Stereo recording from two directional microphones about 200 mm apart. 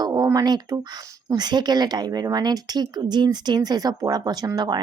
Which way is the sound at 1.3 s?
20° right (ahead or behind).